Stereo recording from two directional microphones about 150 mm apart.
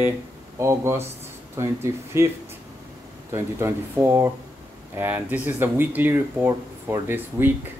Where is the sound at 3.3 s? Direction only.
15° right (ahead or behind).